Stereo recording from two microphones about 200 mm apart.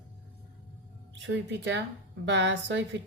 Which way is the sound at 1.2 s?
60° right (ahead or behind).